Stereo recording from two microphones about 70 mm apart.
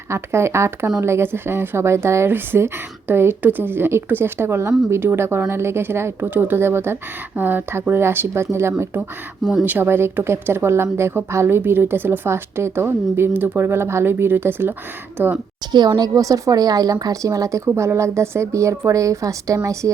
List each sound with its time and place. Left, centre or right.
0.1 s speech: right
9.0 s speech: centre
9.6 s speech: right
15.7 s a woman's voice: right
17.7 s a woman's voice: right